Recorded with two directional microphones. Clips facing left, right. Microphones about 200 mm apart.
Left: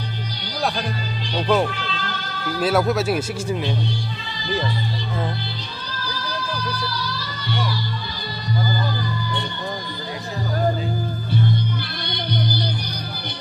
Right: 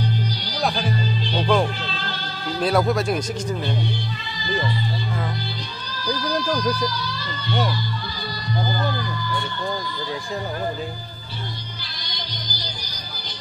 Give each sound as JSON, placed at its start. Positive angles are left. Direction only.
{"t": 0.7, "sound": "music", "side_deg": 0}
{"t": 2.6, "sound": "speech", "side_deg": 5}
{"t": 12.1, "sound": "music", "side_deg": 60}